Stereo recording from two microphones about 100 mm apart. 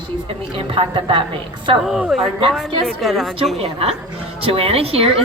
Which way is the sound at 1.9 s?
5° right (ahead or behind).